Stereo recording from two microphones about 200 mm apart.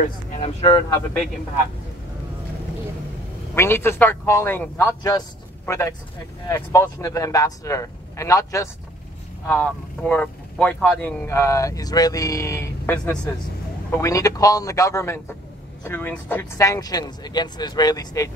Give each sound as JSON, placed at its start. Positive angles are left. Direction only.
{"t": 0.0, "sound": "speech", "side_deg": 35}
{"t": 3.5, "sound": "speech", "side_deg": 10}
{"t": 13.9, "sound": "speech", "side_deg": 15}